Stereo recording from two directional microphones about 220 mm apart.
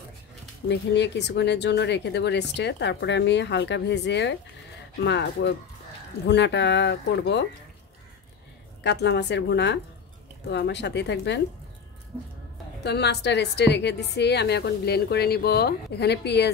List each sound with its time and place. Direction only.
0.7 s speech: 50° left (ahead or behind)
8.8 s speech: 50° left (ahead or behind)
12.8 s speech: 50° left (ahead or behind)